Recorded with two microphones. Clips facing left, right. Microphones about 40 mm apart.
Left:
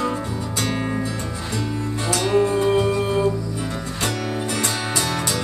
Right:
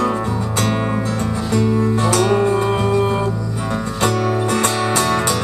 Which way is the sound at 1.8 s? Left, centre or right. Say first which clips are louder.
Right 8 dB; right.